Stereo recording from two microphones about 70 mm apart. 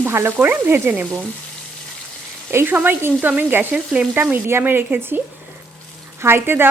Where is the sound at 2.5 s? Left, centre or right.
Right.